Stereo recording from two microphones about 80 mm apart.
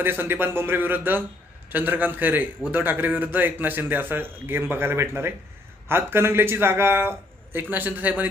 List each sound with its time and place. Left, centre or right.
0.0 s a man's voice: right